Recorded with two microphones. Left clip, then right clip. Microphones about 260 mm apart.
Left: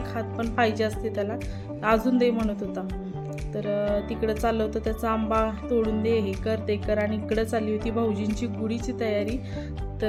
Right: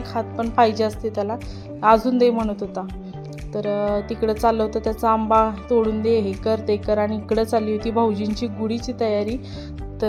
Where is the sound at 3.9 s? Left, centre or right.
Centre.